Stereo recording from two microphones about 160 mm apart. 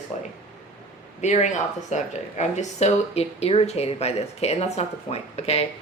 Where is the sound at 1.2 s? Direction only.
45° left (ahead or behind).